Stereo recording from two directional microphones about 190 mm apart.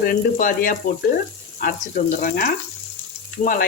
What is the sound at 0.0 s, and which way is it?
Speech, 45° left (ahead or behind).